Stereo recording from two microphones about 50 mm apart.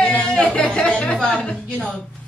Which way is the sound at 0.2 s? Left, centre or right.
Centre.